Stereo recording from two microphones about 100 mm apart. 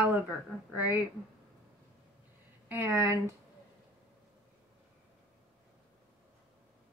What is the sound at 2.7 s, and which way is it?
Speech, 25° right (ahead or behind).